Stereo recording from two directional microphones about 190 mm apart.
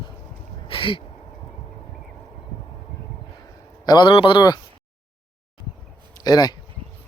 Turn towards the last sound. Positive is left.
turn(degrees=20)  # may be behind; listen again after turning